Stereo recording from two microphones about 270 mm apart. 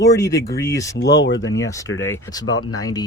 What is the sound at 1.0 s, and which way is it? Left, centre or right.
Speech, left.